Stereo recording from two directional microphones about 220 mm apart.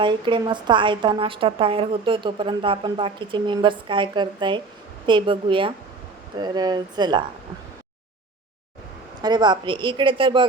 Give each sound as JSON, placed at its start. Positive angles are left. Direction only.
{"t": 0.0, "sound": "a woman's voice", "side_deg": -20}
{"t": 9.2, "sound": "a woman's voice", "side_deg": -20}